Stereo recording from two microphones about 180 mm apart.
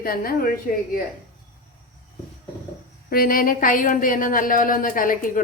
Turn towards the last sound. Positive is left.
turn(degrees=50)  # may be behind; listen again after turning